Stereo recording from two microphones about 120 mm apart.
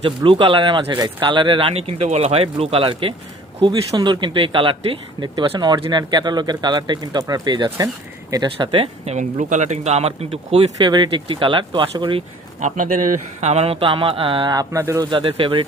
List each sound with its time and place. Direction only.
0.0 s speech: 50° right (ahead or behind)
8.4 s speech: 50° right (ahead or behind)
9.1 s speech: 85° right; by 12.2 s 45° right (ahead or behind)
12.5 s speech: 90° right; by 14.5 s 45° right (ahead or behind)
14.5 s speech: 30° right (ahead or behind)
15.1 s speech: 45° right (ahead or behind)